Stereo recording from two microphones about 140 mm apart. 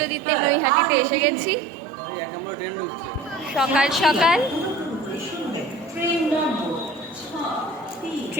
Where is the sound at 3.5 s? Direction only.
5° right (ahead or behind).